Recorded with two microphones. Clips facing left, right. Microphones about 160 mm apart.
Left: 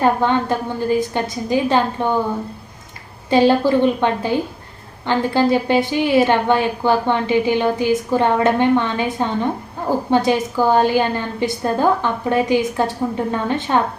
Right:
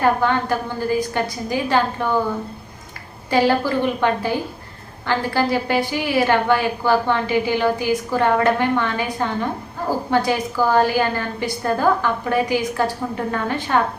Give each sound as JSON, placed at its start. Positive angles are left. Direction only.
{"t": 0.0, "sound": "a woman's voice", "side_deg": 20}
{"t": 3.2, "sound": "a woman's voice", "side_deg": 20}